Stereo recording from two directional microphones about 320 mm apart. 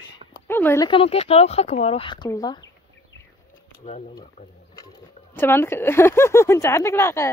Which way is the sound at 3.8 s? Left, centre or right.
Left.